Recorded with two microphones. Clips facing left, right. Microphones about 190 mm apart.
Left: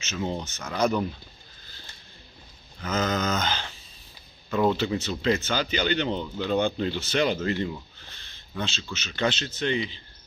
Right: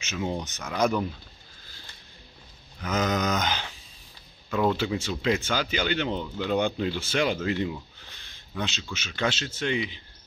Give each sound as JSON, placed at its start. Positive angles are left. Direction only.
{"t": 0.0, "sound": "speech", "side_deg": -15}
{"t": 2.8, "sound": "speech", "side_deg": -15}
{"t": 4.5, "sound": "speech", "side_deg": -5}